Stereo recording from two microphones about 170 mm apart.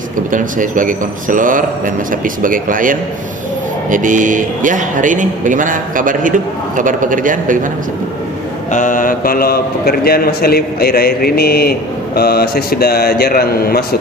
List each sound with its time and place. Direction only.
0.3 s a man's voice: 50° right (ahead or behind)
8.7 s a man's voice: 50° left (ahead or behind)